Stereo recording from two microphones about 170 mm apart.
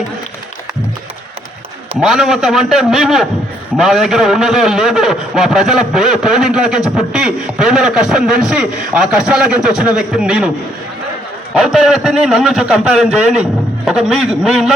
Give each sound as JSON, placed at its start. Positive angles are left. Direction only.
{"t": 2.0, "sound": "a man's voice", "side_deg": -5}
{"t": 11.5, "sound": "a man's voice", "side_deg": 0}